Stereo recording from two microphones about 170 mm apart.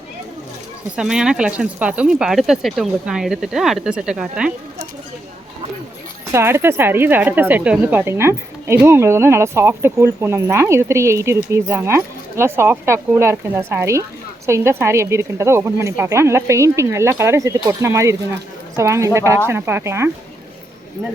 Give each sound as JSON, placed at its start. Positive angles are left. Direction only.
{"t": 0.9, "sound": "speech", "side_deg": -5}
{"t": 6.3, "sound": "a woman's voice", "side_deg": -15}